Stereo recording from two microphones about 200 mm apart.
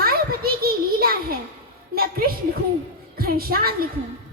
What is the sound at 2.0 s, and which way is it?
A woman's voice, 50° right (ahead or behind).